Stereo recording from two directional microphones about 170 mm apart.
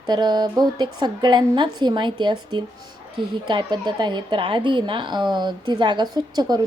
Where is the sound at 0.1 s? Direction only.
25° right (ahead or behind).